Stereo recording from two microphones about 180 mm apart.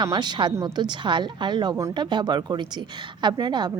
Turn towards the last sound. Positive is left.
turn(degrees=-25)  # may be behind; listen again after turning